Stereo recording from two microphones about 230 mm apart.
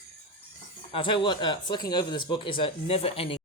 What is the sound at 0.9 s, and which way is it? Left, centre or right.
Speech, left.